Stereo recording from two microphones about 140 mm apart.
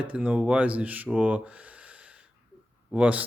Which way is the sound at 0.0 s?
10° right (ahead or behind).